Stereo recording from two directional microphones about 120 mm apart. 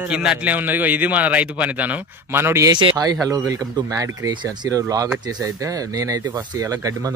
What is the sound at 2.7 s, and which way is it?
Speech, 40° right (ahead or behind).